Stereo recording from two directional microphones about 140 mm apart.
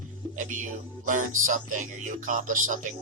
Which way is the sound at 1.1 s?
65° right (ahead or behind).